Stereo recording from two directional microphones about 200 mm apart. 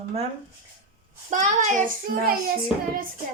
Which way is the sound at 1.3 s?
40° right (ahead or behind).